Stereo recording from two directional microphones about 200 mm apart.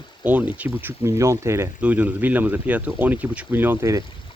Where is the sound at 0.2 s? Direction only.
10° right (ahead or behind).